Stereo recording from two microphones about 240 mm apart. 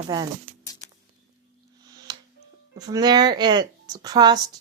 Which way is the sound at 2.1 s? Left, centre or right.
Centre.